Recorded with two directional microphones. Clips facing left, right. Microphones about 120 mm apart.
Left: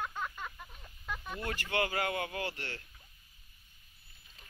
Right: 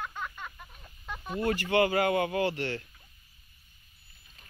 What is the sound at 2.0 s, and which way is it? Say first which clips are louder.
Speech: right 9 dB; 55° right (ahead or behind).